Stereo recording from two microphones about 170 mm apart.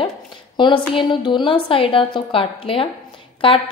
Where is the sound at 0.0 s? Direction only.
25° left (ahead or behind).